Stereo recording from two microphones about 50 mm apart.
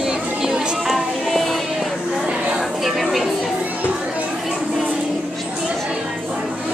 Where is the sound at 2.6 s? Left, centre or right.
Centre.